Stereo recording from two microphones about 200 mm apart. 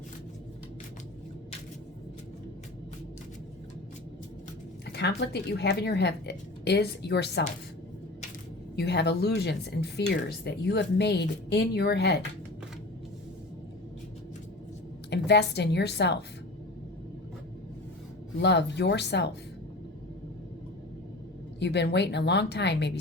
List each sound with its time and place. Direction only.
4.9 s speech: 55° left (ahead or behind)
8.7 s speech: 55° left (ahead or behind)
15.1 s speech: 60° left (ahead or behind)
18.3 s speech: 60° left (ahead or behind)
21.6 s speech: 60° left (ahead or behind)